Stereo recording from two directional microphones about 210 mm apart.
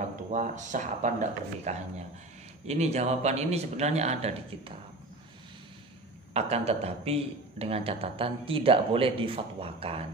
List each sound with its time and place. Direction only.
0.3 s speech: 35° right (ahead or behind)
6.3 s a man's voice: 30° right (ahead or behind)